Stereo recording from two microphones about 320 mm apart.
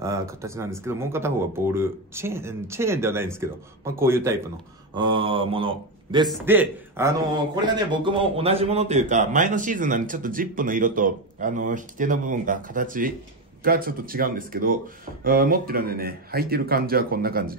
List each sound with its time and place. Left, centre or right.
0.0 s speech: centre
6.2 s a man's voice: centre; by 17.6 s right